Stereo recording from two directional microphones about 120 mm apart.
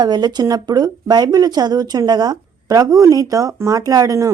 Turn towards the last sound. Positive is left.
turn(degrees=-30)  # may be behind; listen again after turning